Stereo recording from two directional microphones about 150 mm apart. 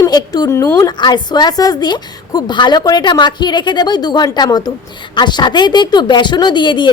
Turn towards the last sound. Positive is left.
turn(degrees=30)  # may be behind; listen again after turning